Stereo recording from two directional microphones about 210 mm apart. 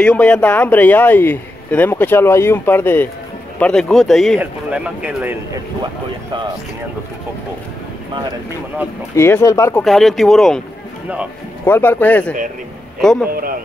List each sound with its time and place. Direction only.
0.0 s speech: 5° left (ahead or behind)
9.1 s speech: 15° left (ahead or behind)
9.8 s speech: centre (ahead or behind)
11.6 s speech: 10° left (ahead or behind)
13.3 s a man's voice: 45° right (ahead or behind)